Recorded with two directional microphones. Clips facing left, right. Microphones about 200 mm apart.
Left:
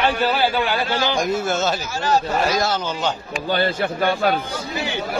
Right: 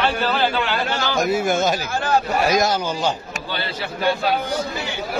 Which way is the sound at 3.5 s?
50° left (ahead or behind).